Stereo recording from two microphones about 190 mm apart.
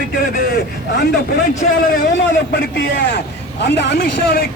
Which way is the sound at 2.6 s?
65° left (ahead or behind).